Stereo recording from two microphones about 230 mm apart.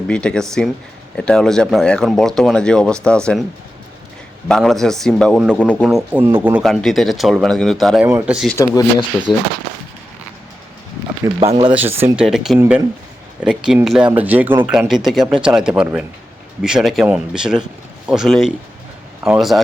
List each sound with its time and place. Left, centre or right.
0.1 s a man's voice: centre
4.4 s a man's voice: centre
8.5 s speech: centre
11.3 s speech: right
11.7 s a man's voice: centre